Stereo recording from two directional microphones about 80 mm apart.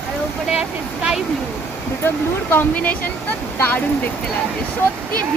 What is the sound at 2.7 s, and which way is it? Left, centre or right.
Speech, centre.